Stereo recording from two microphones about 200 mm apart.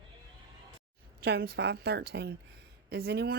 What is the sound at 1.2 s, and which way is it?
Speech, 50° right (ahead or behind).